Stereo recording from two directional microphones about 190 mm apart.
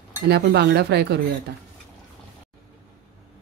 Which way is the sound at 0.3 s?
60° right (ahead or behind).